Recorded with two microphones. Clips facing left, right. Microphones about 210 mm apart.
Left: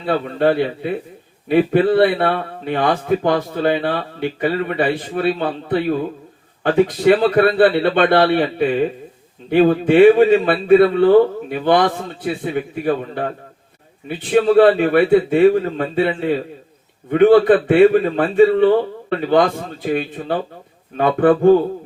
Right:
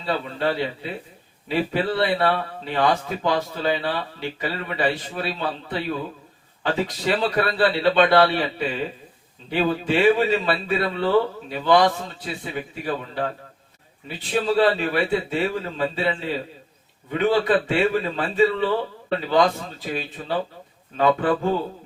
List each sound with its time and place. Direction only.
0.0 s a man's voice: 55° left (ahead or behind)